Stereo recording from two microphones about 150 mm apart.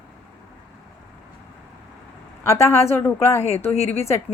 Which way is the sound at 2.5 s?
15° left (ahead or behind).